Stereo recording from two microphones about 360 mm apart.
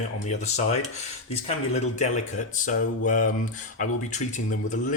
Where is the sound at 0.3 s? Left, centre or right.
Centre.